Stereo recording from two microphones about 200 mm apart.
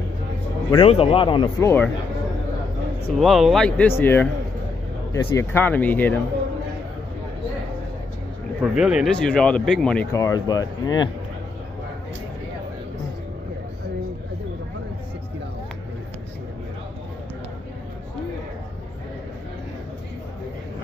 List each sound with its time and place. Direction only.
0.7 s speech: 25° left (ahead or behind)
3.2 s a man's voice: centre (ahead or behind)
8.5 s a man's voice: 5° right (ahead or behind)
10.1 s speech: 15° left (ahead or behind)